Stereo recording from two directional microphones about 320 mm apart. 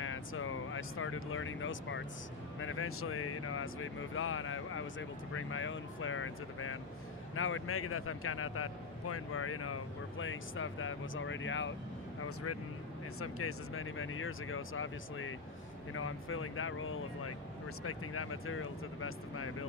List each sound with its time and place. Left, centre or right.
0.0 s speech: left